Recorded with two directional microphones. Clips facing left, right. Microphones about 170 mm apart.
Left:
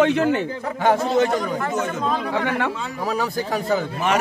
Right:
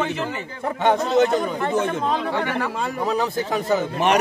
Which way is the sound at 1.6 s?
30° right (ahead or behind).